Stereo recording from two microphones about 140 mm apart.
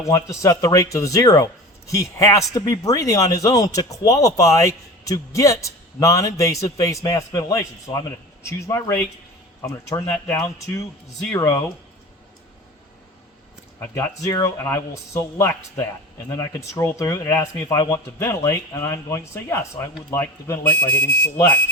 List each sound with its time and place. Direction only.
0.1 s speech: 20° left (ahead or behind)
13.7 s speech: 20° left (ahead or behind)